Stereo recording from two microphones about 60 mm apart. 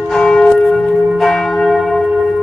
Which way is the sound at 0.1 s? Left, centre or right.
Centre.